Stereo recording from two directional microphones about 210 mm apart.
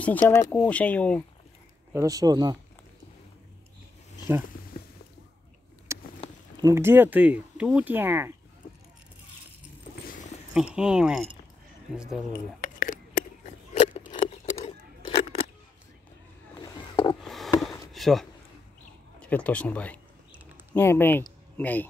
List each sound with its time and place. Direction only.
0.0 s speech: 5° left (ahead or behind)
2.0 s speech: 15° right (ahead or behind)
5.9 s a sound: 15° right (ahead or behind)
6.5 s speech: 15° right (ahead or behind)
10.5 s speech: 5° right (ahead or behind)
12.5 s a sound: 40° left (ahead or behind)
16.5 s boat: 20° left (ahead or behind)
17.2 s a sound: centre (ahead or behind)
19.1 s speech: 5° left (ahead or behind)